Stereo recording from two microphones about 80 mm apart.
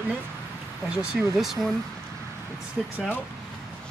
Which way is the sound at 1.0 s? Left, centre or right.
Centre.